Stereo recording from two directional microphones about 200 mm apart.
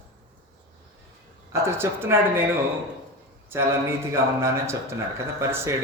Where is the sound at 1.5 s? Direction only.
15° right (ahead or behind).